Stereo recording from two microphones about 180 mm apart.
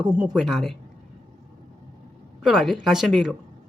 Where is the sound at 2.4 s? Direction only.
Centre (ahead or behind).